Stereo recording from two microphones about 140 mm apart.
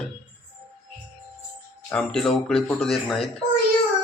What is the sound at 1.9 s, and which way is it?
Speech, 5° left (ahead or behind).